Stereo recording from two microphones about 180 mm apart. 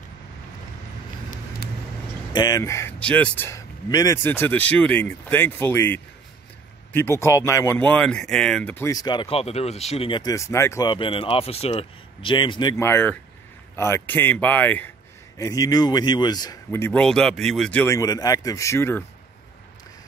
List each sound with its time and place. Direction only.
2.3 s speech: 20° left (ahead or behind)